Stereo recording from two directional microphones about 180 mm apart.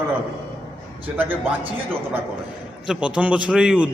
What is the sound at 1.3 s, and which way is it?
Speech, 30° right (ahead or behind).